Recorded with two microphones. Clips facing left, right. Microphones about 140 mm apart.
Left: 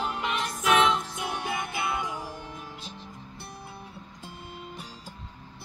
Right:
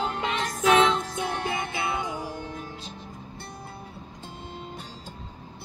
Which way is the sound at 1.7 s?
25° right (ahead or behind).